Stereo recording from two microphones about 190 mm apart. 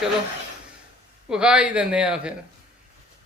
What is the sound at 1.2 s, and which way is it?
Speech, 5° right (ahead or behind).